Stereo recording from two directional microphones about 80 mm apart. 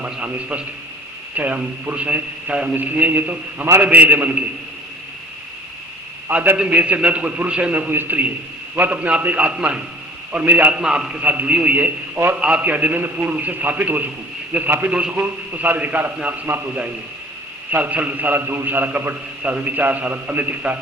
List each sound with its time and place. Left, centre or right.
0.0 s a man's voice: centre
6.3 s a man's voice: right
10.4 s a man's voice: right
10.7 s a man's voice: centre